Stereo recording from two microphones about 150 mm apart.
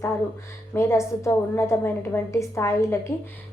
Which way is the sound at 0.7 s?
20° left (ahead or behind).